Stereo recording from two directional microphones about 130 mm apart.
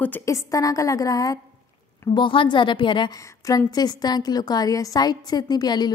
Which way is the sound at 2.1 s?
40° left (ahead or behind).